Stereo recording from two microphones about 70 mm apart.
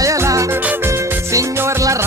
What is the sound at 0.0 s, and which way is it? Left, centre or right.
Music, right.